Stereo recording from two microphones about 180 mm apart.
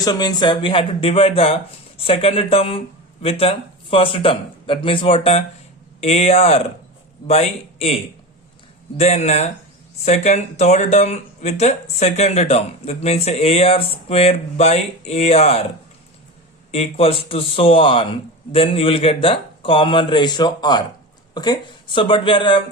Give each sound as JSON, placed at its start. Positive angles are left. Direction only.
{"t": 0.0, "sound": "speech", "side_deg": 20}
{"t": 16.7, "sound": "speech", "side_deg": 35}